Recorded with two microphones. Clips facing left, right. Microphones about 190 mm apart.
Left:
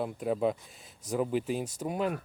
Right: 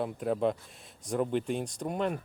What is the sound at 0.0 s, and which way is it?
Speech, centre (ahead or behind).